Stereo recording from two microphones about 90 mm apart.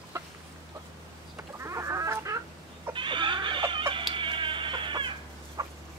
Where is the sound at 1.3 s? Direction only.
30° right (ahead or behind).